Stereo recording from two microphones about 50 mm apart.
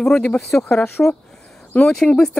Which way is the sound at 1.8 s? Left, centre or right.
Centre.